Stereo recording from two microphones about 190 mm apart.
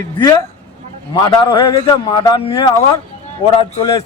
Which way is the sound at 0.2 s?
25° left (ahead or behind).